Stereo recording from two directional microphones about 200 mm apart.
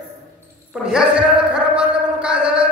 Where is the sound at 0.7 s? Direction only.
5° right (ahead or behind).